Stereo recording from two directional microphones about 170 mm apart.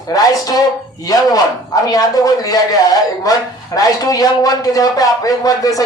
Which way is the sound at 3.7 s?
20° left (ahead or behind).